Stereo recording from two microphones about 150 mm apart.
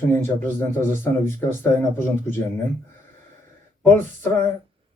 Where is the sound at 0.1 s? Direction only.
15° left (ahead or behind).